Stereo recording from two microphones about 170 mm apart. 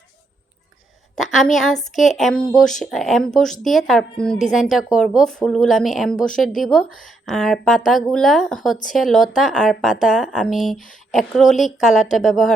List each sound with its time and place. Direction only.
1.1 s a woman's voice: centre (ahead or behind)